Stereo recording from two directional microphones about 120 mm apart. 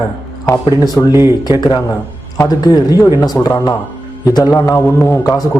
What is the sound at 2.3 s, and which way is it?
A man's voice, 30° left (ahead or behind).